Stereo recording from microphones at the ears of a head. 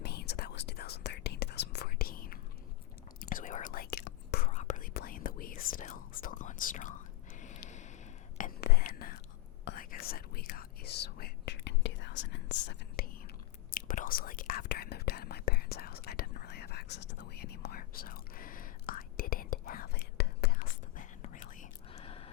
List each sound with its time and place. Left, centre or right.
0.0 s whispering: left
7.4 s a sound: left
8.4 s whispering: left